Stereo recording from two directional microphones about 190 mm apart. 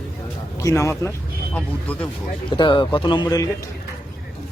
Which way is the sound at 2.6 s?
25° left (ahead or behind).